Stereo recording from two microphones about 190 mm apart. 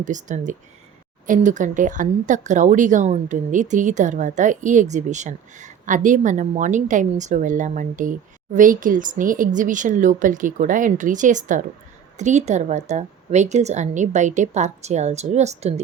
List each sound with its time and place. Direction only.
0.0 s speech: 40° right (ahead or behind)